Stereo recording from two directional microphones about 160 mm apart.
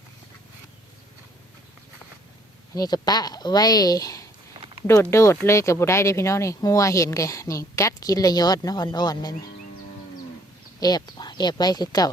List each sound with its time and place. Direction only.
2.7 s speech: 25° left (ahead or behind)
10.8 s speech: 25° left (ahead or behind)